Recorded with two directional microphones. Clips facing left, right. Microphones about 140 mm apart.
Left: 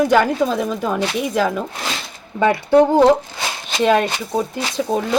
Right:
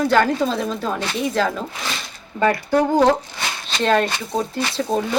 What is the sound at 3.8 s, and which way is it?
Speech, 10° left (ahead or behind).